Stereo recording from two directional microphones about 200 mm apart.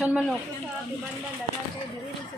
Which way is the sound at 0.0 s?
5° right (ahead or behind).